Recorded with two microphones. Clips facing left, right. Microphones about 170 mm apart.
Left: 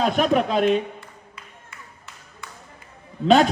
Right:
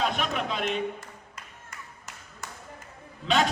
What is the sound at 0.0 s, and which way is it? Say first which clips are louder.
Speech: left 9 dB; 40° left (ahead or behind).